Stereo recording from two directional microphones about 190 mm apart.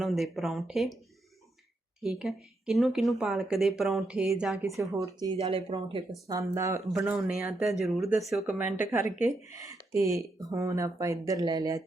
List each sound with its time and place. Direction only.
0.0 s a woman's voice: centre (ahead or behind)
2.0 s a woman's voice: centre (ahead or behind)
4.9 s speech: 20° right (ahead or behind)
5.4 s speech: 30° right (ahead or behind)
6.2 s speech: 15° right (ahead or behind)
6.9 s a woman's voice: 5° right (ahead or behind); by 11.8 s 20° right (ahead or behind)